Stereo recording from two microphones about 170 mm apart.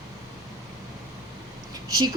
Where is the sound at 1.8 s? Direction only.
20° right (ahead or behind).